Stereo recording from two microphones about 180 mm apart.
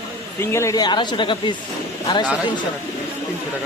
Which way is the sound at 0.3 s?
15° left (ahead or behind).